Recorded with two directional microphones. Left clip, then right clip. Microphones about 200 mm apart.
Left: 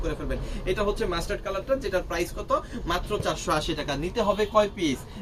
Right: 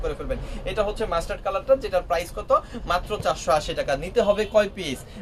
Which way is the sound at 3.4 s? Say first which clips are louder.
Right 5 dB; 50° right (ahead or behind).